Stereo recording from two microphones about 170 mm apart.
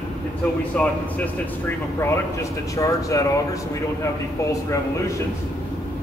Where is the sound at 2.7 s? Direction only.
20° left (ahead or behind).